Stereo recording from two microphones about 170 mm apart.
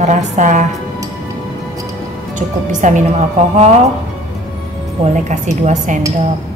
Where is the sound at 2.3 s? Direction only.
45° right (ahead or behind).